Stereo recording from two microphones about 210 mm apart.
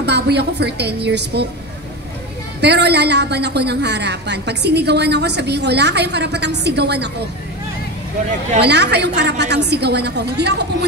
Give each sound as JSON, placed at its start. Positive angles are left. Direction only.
{"t": 0.0, "sound": "a woman's voice", "side_deg": -50}
{"t": 2.6, "sound": "a woman's voice", "side_deg": -50}
{"t": 8.5, "sound": "a woman's voice", "side_deg": -55}